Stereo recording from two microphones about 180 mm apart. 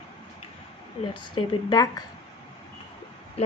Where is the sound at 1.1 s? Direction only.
25° left (ahead or behind).